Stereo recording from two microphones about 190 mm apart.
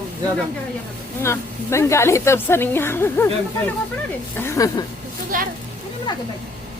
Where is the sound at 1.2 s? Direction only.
15° left (ahead or behind).